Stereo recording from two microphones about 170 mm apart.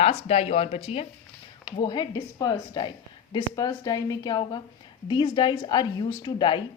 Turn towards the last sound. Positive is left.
turn(degrees=25)  # may be behind; listen again after turning